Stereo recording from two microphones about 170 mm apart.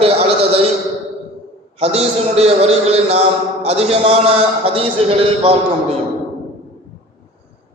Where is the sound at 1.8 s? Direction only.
35° right (ahead or behind).